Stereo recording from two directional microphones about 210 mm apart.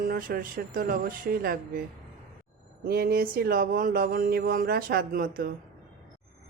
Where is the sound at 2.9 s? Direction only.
45° right (ahead or behind).